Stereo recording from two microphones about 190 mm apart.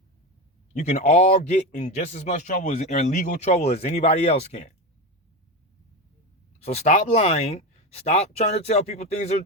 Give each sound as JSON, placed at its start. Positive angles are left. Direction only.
{"t": 0.7, "sound": "a man's voice", "side_deg": 40}
{"t": 6.6, "sound": "a man's voice", "side_deg": 35}